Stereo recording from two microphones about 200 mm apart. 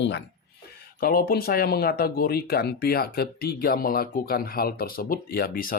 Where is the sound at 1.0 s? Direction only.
45° left (ahead or behind).